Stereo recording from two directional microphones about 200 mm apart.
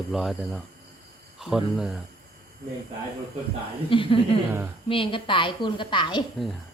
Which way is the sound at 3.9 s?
25° left (ahead or behind).